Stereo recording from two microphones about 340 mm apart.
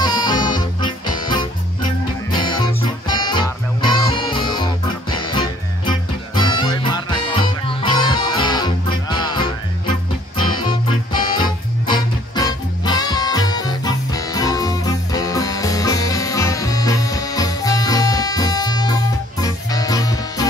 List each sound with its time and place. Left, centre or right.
0.0 s music: centre